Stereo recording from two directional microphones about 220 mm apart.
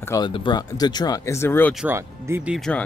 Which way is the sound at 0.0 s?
15° left (ahead or behind).